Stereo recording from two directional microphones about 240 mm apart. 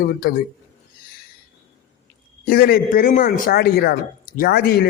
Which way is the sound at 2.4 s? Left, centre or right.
Left.